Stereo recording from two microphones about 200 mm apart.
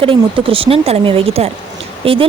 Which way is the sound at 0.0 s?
25° right (ahead or behind).